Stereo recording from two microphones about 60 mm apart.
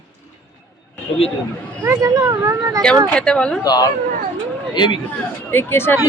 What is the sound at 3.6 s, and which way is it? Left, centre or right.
Speech, left.